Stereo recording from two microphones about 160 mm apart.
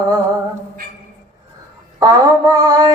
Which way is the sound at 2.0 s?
25° right (ahead or behind).